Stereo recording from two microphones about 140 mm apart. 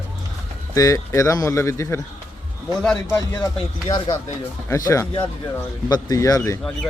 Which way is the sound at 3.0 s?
25° left (ahead or behind).